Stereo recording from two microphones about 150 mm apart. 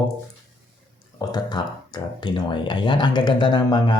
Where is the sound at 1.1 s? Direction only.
30° left (ahead or behind).